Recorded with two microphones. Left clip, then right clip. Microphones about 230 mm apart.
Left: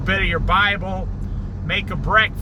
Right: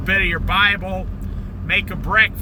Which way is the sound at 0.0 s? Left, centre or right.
Centre.